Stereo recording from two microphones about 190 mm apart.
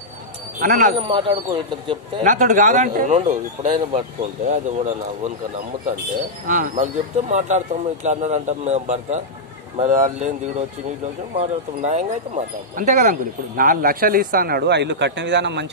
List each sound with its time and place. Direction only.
0.6 s speech: 50° right (ahead or behind)
0.9 s speech: 25° right (ahead or behind)
2.2 s speech: 40° right (ahead or behind)
6.4 s speech: 40° right (ahead or behind)
11.3 s speech: 35° right (ahead or behind); by 15.7 s 65° right (ahead or behind)